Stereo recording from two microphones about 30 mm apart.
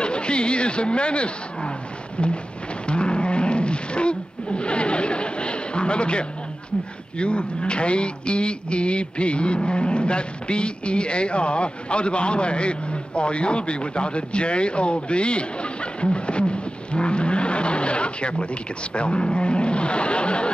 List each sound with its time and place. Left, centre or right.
0.0 s speech: left
2.9 s roaring cats: left
7.2 s speech: left